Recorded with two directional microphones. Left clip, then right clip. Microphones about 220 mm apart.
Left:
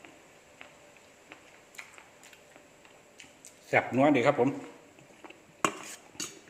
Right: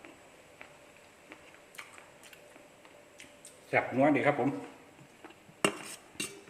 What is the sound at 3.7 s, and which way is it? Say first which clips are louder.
Speech: left 2 dB; 40° left (ahead or behind).